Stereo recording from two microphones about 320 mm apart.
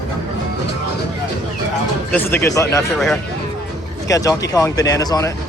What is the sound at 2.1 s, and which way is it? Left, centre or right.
Speech, centre.